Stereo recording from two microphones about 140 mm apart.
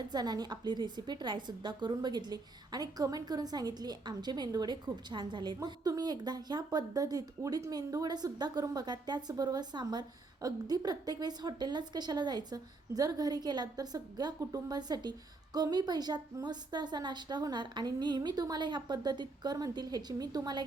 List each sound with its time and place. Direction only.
0.1 s a woman's voice: 30° right (ahead or behind)